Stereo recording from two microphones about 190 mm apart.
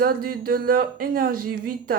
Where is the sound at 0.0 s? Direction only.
50° right (ahead or behind).